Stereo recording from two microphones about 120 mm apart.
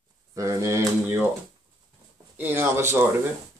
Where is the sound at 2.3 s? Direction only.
20° right (ahead or behind).